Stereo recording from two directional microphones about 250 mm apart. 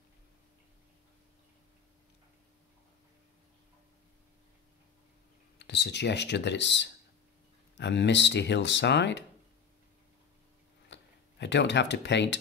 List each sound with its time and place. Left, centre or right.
5.6 s speech: left
10.9 s speech: left